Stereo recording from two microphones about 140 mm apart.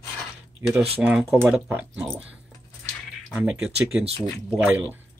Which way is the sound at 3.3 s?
5° right (ahead or behind).